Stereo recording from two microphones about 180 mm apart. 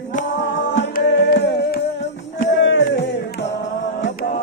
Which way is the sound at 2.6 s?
85° left.